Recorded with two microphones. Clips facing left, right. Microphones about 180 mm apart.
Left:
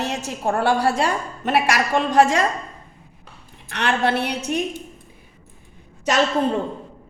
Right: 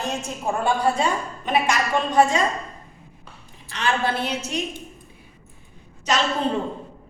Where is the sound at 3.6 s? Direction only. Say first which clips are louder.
Left 3 dB; 70° left (ahead or behind).